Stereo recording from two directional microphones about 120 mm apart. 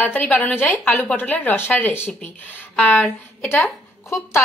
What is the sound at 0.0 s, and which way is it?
A woman's voice, 15° left (ahead or behind).